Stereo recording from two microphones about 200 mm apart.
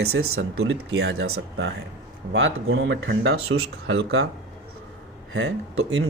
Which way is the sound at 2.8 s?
70° right (ahead or behind).